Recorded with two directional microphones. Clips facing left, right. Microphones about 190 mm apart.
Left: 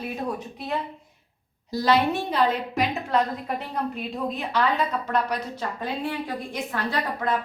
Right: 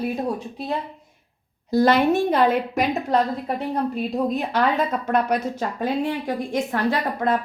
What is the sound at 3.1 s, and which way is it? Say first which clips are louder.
A woman's voice: right 3 dB; 35° right (ahead or behind).